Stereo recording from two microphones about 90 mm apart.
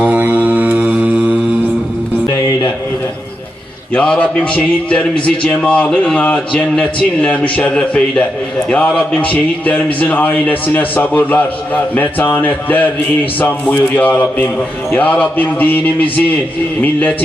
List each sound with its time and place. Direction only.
0.0 s mantra: 15° right (ahead or behind)
3.9 s a man's voice: 10° left (ahead or behind)